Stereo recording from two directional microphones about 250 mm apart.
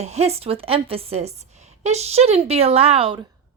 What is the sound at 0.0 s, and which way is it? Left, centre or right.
Speech, right.